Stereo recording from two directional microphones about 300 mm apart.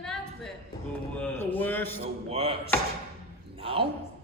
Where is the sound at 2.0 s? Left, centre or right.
Centre.